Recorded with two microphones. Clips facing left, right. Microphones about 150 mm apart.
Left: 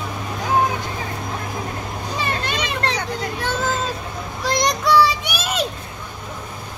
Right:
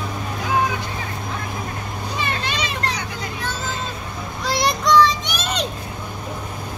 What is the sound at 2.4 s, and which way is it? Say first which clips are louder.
Children playing: left 2 dB; 55° left (ahead or behind).